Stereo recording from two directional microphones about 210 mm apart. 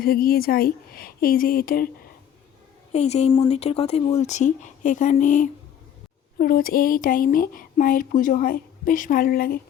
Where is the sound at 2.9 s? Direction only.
30° left (ahead or behind).